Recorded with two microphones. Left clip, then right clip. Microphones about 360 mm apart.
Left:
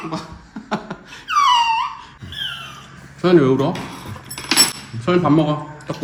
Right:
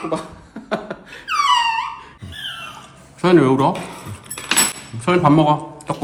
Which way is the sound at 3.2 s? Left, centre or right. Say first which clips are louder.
Right 1 dB; centre.